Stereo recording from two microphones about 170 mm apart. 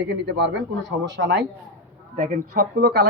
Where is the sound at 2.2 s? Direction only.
60° right (ahead or behind).